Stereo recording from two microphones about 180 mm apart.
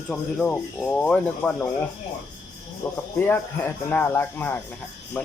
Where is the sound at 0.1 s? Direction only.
5° left (ahead or behind).